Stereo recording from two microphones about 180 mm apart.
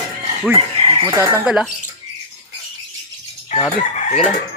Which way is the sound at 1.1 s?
10° right (ahead or behind).